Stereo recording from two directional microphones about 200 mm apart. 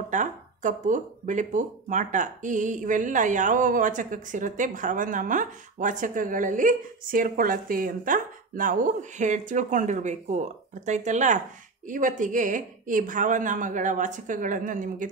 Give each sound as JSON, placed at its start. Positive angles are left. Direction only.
{"t": 0.1, "sound": "speech", "side_deg": -40}